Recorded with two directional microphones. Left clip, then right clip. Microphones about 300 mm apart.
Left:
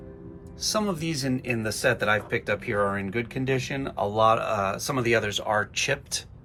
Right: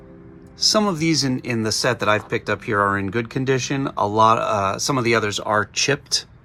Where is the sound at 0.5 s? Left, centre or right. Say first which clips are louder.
Right 9 dB; centre.